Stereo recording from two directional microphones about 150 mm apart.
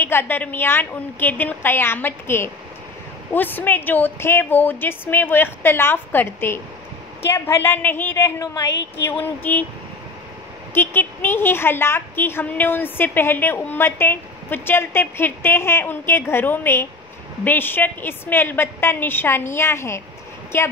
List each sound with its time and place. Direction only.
0.0 s a woman's voice: 15° left (ahead or behind)
10.7 s a woman's voice: 15° left (ahead or behind)